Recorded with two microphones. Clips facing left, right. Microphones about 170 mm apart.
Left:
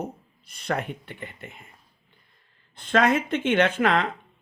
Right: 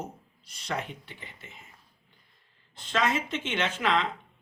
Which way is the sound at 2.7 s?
55° left (ahead or behind).